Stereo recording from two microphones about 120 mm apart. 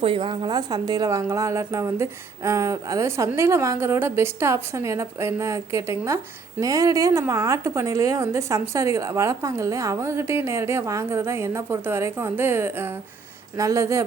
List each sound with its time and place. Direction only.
0.0 s speech: 45° right (ahead or behind); by 14.0 s 25° right (ahead or behind)